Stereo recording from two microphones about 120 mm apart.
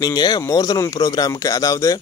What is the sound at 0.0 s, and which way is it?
Speech, 35° left (ahead or behind).